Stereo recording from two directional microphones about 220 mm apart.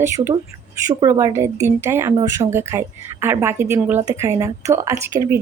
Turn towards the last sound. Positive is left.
turn(degrees=-15)  # may be behind; listen again after turning